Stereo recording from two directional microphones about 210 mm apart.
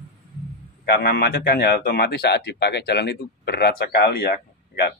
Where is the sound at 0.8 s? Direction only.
50° left (ahead or behind).